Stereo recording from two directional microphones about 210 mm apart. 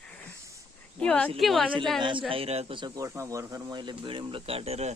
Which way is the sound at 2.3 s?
30° right (ahead or behind).